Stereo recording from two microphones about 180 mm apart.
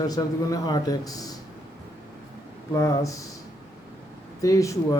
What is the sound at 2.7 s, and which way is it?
Speech, 20° left (ahead or behind).